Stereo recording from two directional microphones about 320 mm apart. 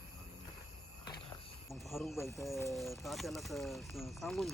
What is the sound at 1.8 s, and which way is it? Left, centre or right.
Speech, centre.